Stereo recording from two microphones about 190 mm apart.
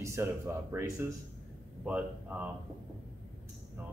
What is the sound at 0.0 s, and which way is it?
Speech, 15° right (ahead or behind).